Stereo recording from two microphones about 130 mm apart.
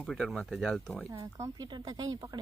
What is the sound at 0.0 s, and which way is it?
Speech, centre (ahead or behind).